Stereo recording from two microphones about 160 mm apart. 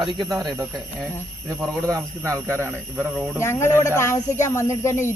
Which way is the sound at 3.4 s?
15° left (ahead or behind).